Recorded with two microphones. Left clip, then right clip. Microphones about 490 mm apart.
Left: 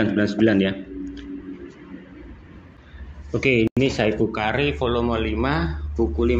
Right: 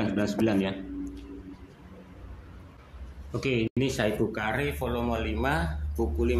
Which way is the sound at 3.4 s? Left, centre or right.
Right.